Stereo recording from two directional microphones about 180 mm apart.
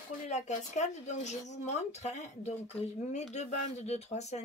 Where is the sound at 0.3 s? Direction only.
40° left (ahead or behind).